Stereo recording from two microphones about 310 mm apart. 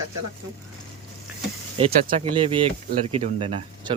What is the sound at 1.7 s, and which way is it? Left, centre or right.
Speech, centre.